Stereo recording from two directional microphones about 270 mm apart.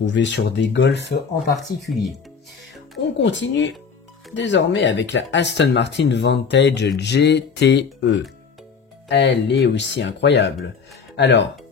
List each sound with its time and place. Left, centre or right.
0.0 s speech: left
1.8 s speech: centre
3.0 s speech: left